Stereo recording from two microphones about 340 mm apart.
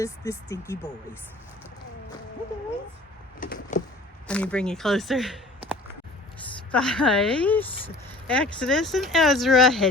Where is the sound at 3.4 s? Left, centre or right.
Left.